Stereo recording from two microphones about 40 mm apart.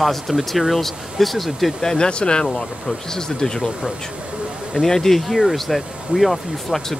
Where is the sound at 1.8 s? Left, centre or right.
Centre.